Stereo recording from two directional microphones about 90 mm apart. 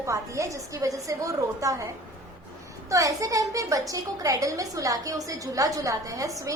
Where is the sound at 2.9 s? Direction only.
40° right (ahead or behind).